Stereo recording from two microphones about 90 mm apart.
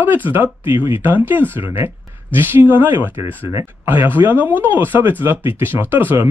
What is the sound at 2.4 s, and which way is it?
Speech, 25° right (ahead or behind).